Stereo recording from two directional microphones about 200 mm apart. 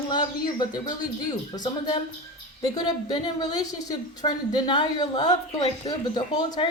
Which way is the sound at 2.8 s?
20° left (ahead or behind).